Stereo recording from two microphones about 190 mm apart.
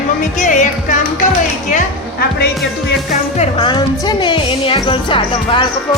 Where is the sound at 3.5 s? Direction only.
25° left (ahead or behind).